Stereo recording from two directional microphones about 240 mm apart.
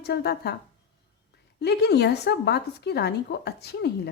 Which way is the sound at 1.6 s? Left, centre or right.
Left.